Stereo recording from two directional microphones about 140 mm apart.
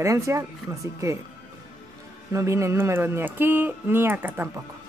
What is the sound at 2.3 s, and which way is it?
Speech, 20° right (ahead or behind).